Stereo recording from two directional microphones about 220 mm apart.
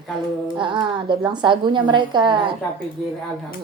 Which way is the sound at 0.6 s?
20° right (ahead or behind).